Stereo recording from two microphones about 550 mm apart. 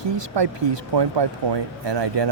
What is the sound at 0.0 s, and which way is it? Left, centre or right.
Speech, right.